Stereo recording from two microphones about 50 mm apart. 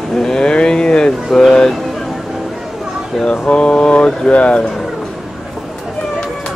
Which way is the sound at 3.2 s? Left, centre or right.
Left.